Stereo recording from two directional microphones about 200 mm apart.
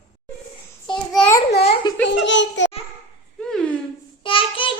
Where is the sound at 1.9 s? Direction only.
20° left (ahead or behind).